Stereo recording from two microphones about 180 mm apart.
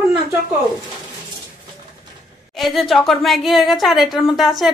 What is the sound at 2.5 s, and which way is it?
A woman's voice, centre (ahead or behind).